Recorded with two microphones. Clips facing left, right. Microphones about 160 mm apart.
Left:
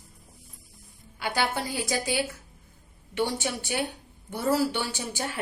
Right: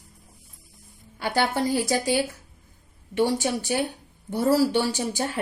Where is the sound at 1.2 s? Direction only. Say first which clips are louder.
Right 5 dB; 40° right (ahead or behind).